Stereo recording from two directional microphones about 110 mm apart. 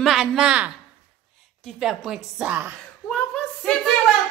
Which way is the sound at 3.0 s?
10° left (ahead or behind).